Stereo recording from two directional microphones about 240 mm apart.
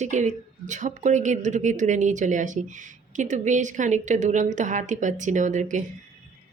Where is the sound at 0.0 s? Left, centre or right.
Right.